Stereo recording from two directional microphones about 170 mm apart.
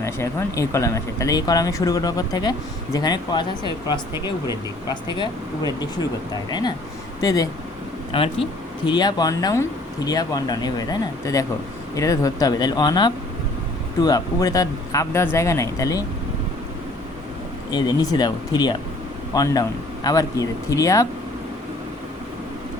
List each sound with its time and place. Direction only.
0.0 s speech: 15° left (ahead or behind)
8.1 s speech: 35° left (ahead or behind)
17.7 s speech: 25° left (ahead or behind)